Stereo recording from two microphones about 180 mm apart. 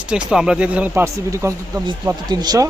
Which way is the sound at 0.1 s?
5° right (ahead or behind).